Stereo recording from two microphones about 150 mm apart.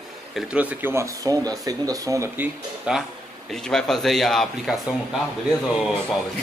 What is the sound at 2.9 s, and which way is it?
Speech, 5° right (ahead or behind).